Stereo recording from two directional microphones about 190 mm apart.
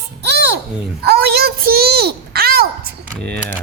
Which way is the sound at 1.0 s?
55° right (ahead or behind).